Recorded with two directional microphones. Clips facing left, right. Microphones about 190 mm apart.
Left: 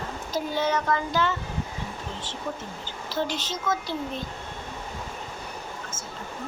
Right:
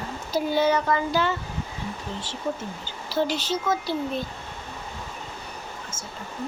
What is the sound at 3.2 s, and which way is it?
Speech, 10° right (ahead or behind).